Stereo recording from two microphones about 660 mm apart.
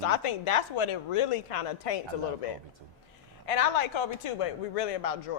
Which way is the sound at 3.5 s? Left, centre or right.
Left.